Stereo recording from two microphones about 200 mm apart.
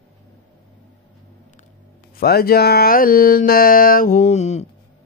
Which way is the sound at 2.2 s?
50° left (ahead or behind).